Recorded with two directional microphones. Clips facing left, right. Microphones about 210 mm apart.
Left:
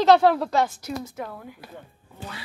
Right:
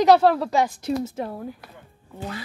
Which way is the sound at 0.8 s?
30° right (ahead or behind).